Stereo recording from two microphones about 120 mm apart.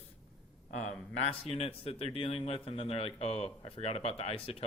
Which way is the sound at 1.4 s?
55° left (ahead or behind).